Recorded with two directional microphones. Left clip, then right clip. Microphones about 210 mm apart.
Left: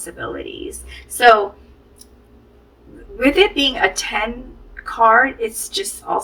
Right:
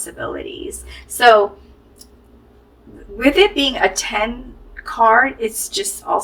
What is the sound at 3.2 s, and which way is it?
Speech, 30° right (ahead or behind).